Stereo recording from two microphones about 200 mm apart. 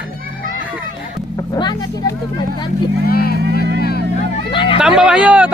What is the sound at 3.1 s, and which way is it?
Speech, 50° left (ahead or behind).